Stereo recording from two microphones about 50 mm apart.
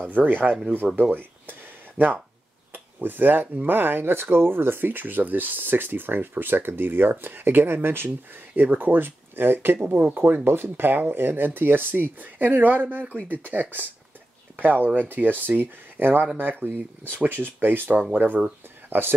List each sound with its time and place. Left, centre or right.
0.1 s speech: right
1.1 s a sound: right
2.7 s speech: right
8.5 s speech: right